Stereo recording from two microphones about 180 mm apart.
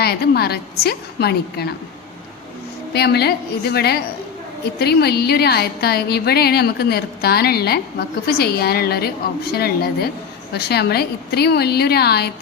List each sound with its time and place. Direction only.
0.0 s a woman's voice: 60° left (ahead or behind)
2.9 s a woman's voice: 65° left (ahead or behind)